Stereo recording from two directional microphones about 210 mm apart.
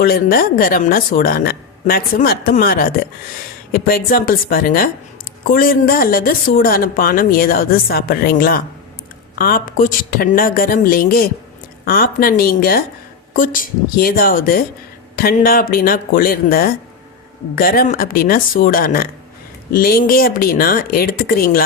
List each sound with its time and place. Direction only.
0.0 s a woman's voice: 45° left (ahead or behind)